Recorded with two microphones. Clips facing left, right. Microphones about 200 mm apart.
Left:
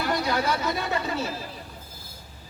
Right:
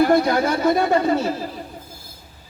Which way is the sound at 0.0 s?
50° right (ahead or behind).